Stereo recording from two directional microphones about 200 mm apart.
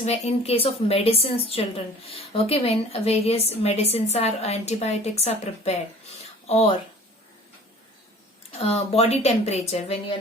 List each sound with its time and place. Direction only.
0.0 s a woman's voice: 30° left (ahead or behind)
8.5 s a woman's voice: 30° left (ahead or behind)